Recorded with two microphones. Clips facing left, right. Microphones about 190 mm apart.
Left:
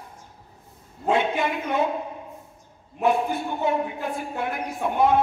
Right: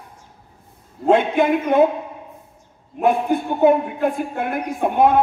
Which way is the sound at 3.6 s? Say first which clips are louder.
Right 10 dB; 55° right (ahead or behind).